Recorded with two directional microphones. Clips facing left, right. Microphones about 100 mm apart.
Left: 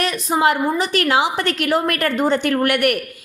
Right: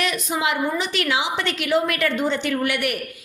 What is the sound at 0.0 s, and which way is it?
A woman's voice, 40° left (ahead or behind).